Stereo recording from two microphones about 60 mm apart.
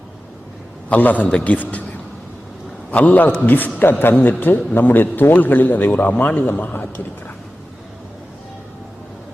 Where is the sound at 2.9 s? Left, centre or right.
Left.